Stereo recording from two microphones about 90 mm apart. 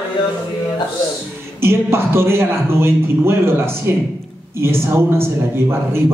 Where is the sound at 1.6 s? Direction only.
30° right (ahead or behind).